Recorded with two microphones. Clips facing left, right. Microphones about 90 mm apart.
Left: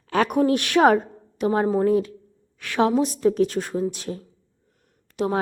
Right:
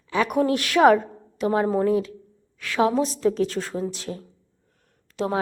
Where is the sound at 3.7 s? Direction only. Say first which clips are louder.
Left 3 dB; 25° right (ahead or behind).